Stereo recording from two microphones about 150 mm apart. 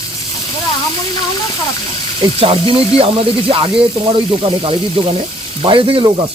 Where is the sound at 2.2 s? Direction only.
35° right (ahead or behind).